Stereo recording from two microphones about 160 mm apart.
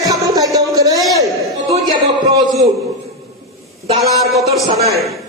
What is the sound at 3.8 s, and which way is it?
Speech, 40° right (ahead or behind).